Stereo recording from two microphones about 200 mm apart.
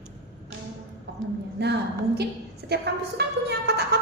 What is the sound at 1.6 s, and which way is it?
Speech, 55° right (ahead or behind).